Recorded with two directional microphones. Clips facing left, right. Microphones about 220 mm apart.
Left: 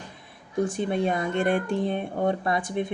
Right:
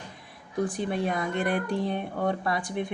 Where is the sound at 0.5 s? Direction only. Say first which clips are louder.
Left 3 dB; 25° left (ahead or behind).